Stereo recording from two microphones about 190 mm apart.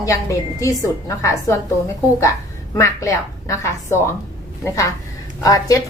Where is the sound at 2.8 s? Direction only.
15° left (ahead or behind).